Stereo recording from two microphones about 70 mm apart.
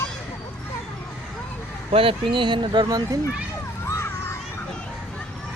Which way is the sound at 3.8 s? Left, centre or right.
Left.